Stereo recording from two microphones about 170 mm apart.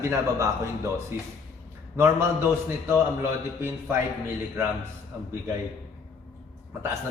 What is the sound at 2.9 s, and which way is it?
A man's voice, 15° right (ahead or behind).